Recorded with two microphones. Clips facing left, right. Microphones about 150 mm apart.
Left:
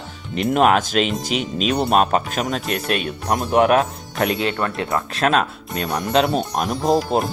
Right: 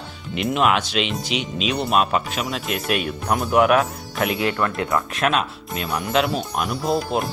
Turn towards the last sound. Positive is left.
turn(degrees=0)  # may be behind; listen again after turning